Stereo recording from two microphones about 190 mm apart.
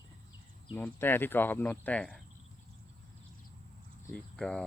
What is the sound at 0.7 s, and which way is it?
Speech, 10° left (ahead or behind).